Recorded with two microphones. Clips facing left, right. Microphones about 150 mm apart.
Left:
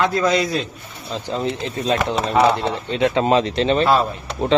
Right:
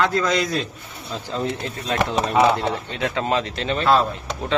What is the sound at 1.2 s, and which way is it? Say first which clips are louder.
Speech: left 2 dB; 20° left (ahead or behind).